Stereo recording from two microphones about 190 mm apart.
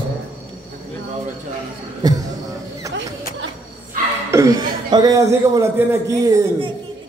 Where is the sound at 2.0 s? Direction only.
20° right (ahead or behind).